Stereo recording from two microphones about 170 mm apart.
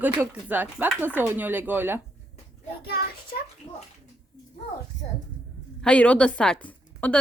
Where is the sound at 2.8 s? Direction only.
60° left (ahead or behind).